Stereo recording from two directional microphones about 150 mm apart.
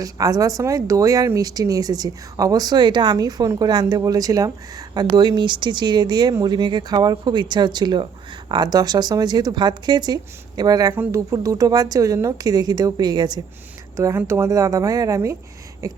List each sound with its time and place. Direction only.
0.0 s speech: 25° right (ahead or behind)
13.9 s speech: 20° right (ahead or behind)